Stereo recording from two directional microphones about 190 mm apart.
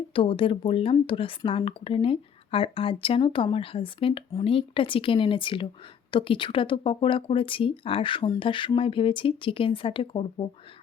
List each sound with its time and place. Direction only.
0.1 s speech: 25° left (ahead or behind)